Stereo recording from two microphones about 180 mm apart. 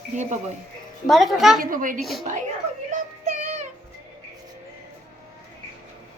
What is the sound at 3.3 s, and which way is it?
Music, 40° right (ahead or behind).